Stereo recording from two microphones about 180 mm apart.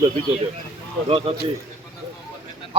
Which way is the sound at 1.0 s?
30° right (ahead or behind).